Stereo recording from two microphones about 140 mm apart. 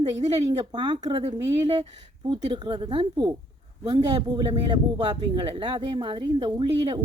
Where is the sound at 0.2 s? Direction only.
25° right (ahead or behind).